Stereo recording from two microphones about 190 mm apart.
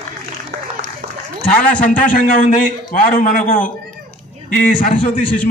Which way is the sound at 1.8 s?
45° left (ahead or behind).